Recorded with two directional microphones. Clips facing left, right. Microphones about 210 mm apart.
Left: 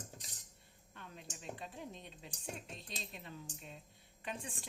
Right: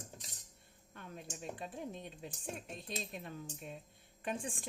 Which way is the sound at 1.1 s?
50° right (ahead or behind).